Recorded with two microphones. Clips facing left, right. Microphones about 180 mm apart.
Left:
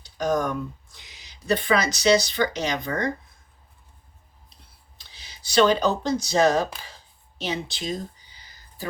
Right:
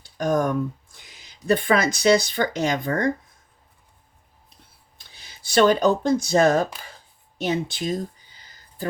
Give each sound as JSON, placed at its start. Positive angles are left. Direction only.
{"t": 0.0, "sound": "speech", "side_deg": -50}
{"t": 4.9, "sound": "speech", "side_deg": -50}